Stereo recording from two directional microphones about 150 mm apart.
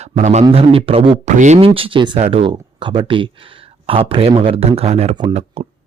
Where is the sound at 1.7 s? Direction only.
35° right (ahead or behind).